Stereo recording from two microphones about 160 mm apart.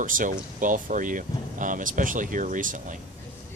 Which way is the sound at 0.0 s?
55° right (ahead or behind).